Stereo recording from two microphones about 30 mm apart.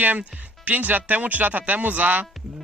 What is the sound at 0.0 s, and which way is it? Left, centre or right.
Speech, right.